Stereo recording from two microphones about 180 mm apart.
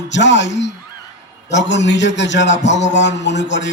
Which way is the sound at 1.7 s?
80° left.